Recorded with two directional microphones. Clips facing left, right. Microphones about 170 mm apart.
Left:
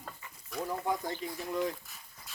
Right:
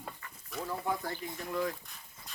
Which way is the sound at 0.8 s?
15° left (ahead or behind).